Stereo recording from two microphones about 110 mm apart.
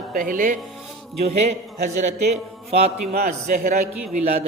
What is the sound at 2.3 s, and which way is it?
Music, 75° right (ahead or behind).